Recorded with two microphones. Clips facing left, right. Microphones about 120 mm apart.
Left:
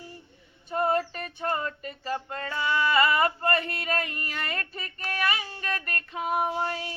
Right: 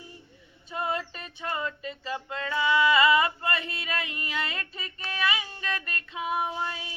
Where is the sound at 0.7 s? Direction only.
50° left (ahead or behind).